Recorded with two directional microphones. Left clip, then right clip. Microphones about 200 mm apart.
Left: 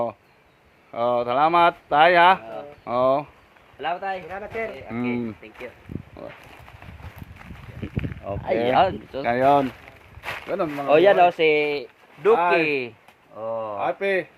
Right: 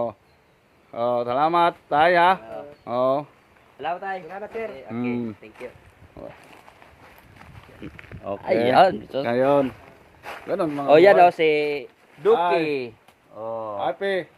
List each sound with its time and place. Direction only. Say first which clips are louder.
0.9 s speech: left 1 dB; 5° right (ahead or behind)
7.8 s a sound: left 6 dB; centre (ahead or behind)
8.2 s speech: right 2 dB; 20° right (ahead or behind)
8.6 s speech: right 3 dB; 50° right (ahead or behind)
9.2 s speech: left 1 dB; 15° right (ahead or behind)
10.5 s speech: right 2 dB; 45° right (ahead or behind)
11.3 s speech: left 1 dB; 5° right (ahead or behind)
11.6 s speech: left 1 dB; 15° left (ahead or behind)